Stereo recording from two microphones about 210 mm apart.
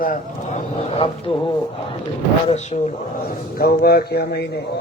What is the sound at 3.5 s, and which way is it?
Speech, 45° left (ahead or behind).